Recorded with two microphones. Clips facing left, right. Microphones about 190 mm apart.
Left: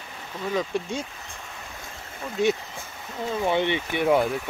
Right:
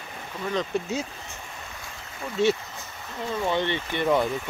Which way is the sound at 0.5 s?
Centre (ahead or behind).